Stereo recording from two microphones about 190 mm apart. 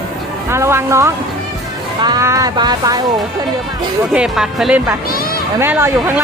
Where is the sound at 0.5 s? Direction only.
15° right (ahead or behind).